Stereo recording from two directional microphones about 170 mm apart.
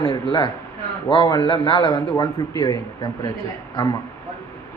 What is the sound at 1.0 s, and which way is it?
A man's voice, 25° left (ahead or behind).